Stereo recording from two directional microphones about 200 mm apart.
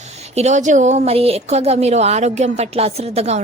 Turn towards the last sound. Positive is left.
turn(degrees=-30)  # may be behind; listen again after turning